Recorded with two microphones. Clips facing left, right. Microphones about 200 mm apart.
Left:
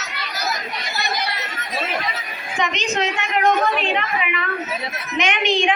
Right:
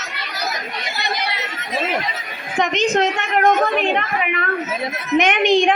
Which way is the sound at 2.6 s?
50° right (ahead or behind).